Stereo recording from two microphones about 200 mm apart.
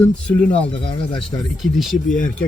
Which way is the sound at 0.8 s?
25° left (ahead or behind).